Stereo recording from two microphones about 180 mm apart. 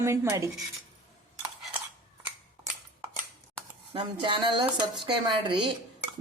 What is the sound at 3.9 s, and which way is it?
Speech, 25° right (ahead or behind).